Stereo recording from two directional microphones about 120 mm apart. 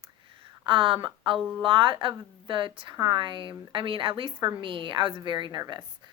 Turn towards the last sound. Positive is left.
turn(degrees=-40)  # may be behind; listen again after turning